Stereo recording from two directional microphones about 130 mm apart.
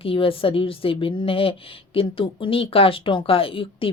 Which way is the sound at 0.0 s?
45° left (ahead or behind).